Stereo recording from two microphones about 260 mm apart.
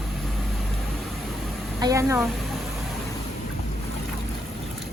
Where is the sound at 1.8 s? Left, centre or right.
Centre.